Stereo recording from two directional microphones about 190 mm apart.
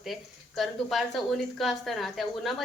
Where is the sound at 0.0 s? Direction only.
Centre (ahead or behind).